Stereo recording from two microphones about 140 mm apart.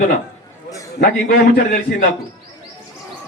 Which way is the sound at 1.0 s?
85° left.